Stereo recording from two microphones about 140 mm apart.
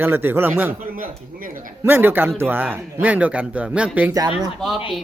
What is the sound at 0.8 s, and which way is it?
Speech, 80° right.